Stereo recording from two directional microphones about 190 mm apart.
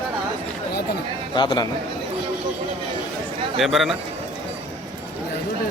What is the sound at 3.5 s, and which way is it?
Speech, centre (ahead or behind).